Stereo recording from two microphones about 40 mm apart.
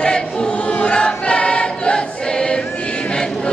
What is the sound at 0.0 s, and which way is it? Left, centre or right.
Choir, left.